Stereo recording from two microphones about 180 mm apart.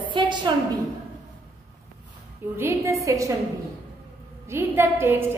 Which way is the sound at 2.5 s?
15° right (ahead or behind).